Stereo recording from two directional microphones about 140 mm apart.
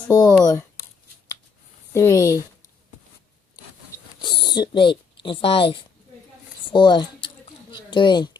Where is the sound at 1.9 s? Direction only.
20° left (ahead or behind).